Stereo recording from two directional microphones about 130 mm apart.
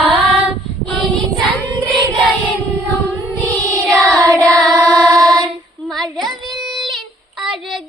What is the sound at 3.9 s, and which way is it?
Child singing, 10° left (ahead or behind).